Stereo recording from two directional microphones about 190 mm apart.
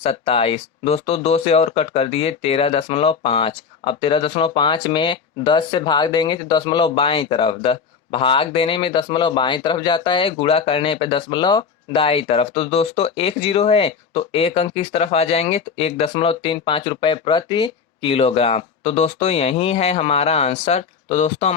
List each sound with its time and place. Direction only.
0.0 s speech: 30° left (ahead or behind)